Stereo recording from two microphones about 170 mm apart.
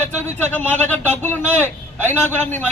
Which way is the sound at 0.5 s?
10° left (ahead or behind).